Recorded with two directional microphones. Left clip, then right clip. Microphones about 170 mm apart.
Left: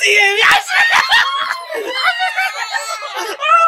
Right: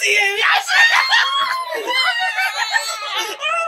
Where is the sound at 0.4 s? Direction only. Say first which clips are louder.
Left 5 dB; 40° left (ahead or behind).